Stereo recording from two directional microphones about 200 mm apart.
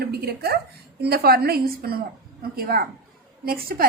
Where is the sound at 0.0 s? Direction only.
50° right (ahead or behind).